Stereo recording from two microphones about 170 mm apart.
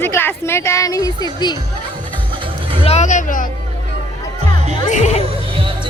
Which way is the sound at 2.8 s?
40° left (ahead or behind).